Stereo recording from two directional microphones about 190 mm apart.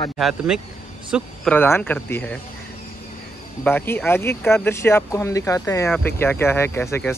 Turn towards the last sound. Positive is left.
turn(degrees=10)  # may be behind; listen again after turning